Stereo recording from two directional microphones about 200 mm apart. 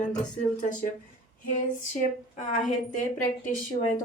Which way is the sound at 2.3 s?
40° left (ahead or behind).